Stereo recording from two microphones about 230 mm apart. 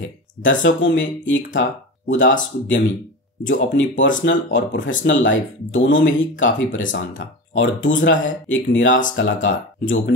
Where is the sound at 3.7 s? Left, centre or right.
Left.